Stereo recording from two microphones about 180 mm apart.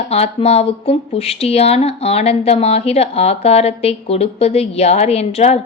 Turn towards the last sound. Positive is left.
turn(degrees=35)  # may be behind; listen again after turning